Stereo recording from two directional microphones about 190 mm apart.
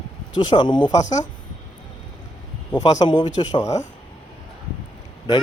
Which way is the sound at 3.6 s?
40° left (ahead or behind).